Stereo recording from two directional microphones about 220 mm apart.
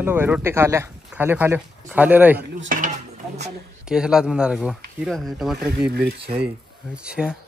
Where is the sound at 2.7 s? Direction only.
35° right (ahead or behind).